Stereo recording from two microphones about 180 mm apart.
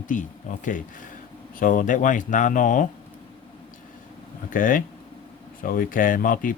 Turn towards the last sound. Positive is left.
turn(degrees=50)  # may be behind; listen again after turning